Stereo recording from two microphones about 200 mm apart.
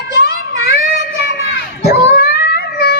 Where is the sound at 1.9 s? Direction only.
55° left (ahead or behind).